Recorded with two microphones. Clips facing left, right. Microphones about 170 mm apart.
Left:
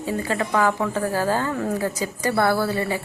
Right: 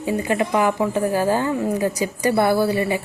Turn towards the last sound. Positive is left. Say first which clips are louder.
# right 4 dB
turn(degrees=-15)  # may be behind; listen again after turning